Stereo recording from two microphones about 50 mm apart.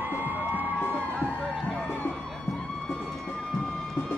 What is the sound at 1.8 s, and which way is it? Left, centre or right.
Music, left.